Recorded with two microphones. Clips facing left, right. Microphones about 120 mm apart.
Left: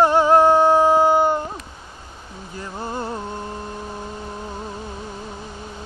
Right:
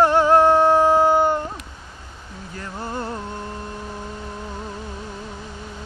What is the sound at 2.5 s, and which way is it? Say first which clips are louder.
Music: left 1 dB; 15° left (ahead or behind).